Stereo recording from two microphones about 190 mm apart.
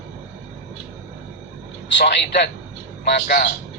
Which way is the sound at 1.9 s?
65° left (ahead or behind).